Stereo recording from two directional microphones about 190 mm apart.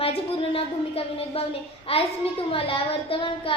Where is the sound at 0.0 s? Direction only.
30° left (ahead or behind).